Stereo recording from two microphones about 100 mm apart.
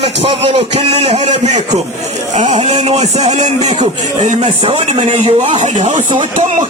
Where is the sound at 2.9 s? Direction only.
90° right.